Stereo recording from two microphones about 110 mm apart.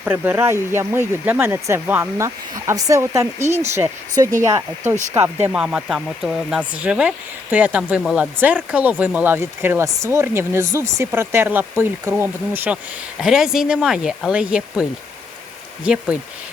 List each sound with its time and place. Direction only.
0.0 s speech: 20° right (ahead or behind)
5.5 s speech: 10° right (ahead or behind)
13.1 s speech: 5° right (ahead or behind)